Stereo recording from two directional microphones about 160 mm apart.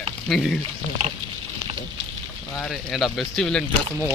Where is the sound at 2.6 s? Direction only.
Centre (ahead or behind).